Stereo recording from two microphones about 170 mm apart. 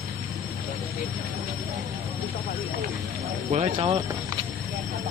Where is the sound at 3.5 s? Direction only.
40° right (ahead or behind).